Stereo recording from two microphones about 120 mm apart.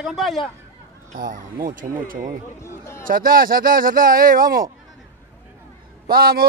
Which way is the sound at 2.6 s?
20° left (ahead or behind).